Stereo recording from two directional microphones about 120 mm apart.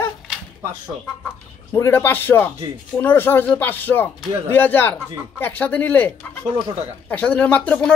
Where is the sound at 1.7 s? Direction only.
20° left (ahead or behind).